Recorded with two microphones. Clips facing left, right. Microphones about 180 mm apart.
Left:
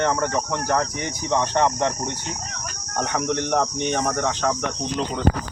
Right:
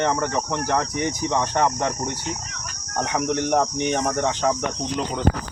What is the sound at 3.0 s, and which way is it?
Speech, 5° right (ahead or behind).